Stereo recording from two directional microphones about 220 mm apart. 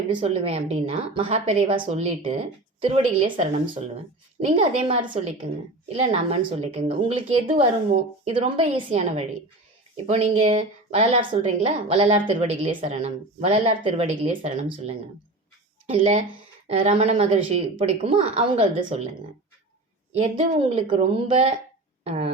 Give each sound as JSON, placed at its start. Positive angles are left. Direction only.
{"t": 0.2, "sound": "a woman's voice", "side_deg": -30}
{"t": 15.9, "sound": "a woman's voice", "side_deg": -30}
{"t": 20.1, "sound": "a woman's voice", "side_deg": -25}